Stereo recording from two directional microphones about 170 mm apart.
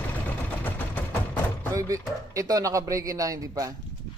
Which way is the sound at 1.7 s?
20° right (ahead or behind).